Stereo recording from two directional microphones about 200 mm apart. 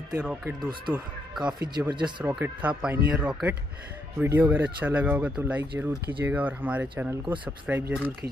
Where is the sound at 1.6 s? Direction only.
20° right (ahead or behind).